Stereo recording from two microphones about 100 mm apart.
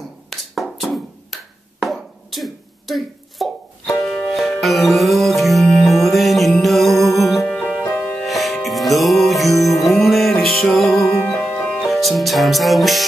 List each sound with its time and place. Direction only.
0.3 s wood block: centre (ahead or behind)
4.0 s music: 5° left (ahead or behind)